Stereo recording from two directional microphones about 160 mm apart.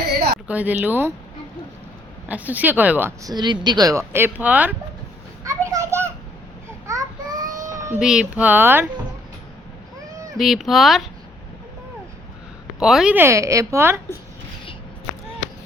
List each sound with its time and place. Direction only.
0.4 s a woman's voice: 10° right (ahead or behind)
2.2 s a woman's voice: 10° right (ahead or behind)
3.2 s speech: 25° right (ahead or behind); by 4.7 s 10° right (ahead or behind)
5.5 s children playing: 20° right (ahead or behind)
6.8 s child singing: 20° right (ahead or behind)
7.9 s a woman's voice: 5° right (ahead or behind)
10.3 s speech: centre (ahead or behind)
12.8 s a woman's voice: 5° right (ahead or behind)